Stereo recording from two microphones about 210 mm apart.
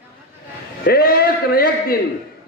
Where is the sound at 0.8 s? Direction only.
45° left (ahead or behind).